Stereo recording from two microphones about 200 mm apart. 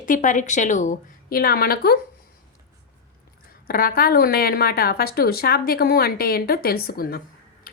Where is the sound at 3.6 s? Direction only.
45° left (ahead or behind).